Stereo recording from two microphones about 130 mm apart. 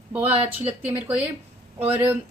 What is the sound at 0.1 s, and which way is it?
A woman's voice, 15° right (ahead or behind).